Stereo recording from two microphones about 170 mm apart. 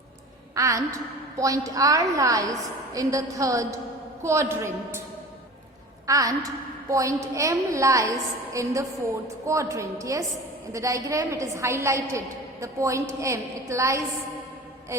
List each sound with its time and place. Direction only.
0.5 s a woman's voice: 20° right (ahead or behind)
6.1 s a woman's voice: 20° right (ahead or behind)